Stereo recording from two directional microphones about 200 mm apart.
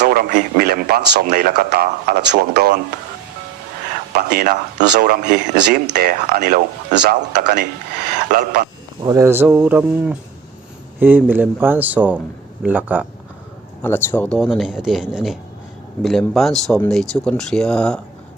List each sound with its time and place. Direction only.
0.0 s speech: 50° right (ahead or behind)
4.2 s speech: 50° right (ahead or behind)
9.0 s speech: 15° right (ahead or behind)
13.8 s speech: 10° left (ahead or behind)